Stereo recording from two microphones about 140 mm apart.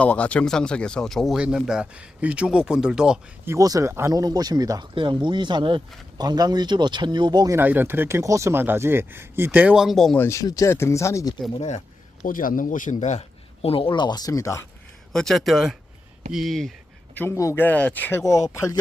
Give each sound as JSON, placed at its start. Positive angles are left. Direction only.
{"t": 0.0, "sound": "speech", "side_deg": 10}
{"t": 3.4, "sound": "speech", "side_deg": -20}
{"t": 10.2, "sound": "speech", "side_deg": 20}
{"t": 12.2, "sound": "a man's voice", "side_deg": 80}
{"t": 15.1, "sound": "speech", "side_deg": 5}
{"t": 17.2, "sound": "speech", "side_deg": 20}
{"t": 18.2, "sound": "speech", "side_deg": 25}